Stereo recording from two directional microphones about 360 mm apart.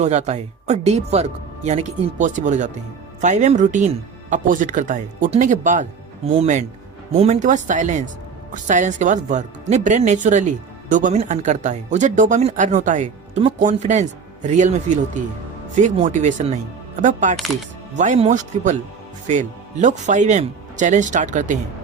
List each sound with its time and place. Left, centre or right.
0.0 s speech: centre
17.3 s speech: centre
17.9 s speech: centre